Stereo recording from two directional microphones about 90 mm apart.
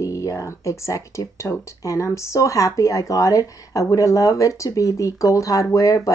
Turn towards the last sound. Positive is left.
turn(degrees=40)  # may be behind; listen again after turning